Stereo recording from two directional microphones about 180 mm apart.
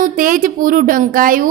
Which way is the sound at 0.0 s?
50° right (ahead or behind).